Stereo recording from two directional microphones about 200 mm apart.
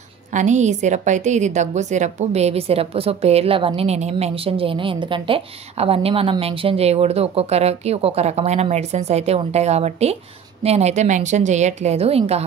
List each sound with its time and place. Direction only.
0.3 s a woman's voice: 35° right (ahead or behind)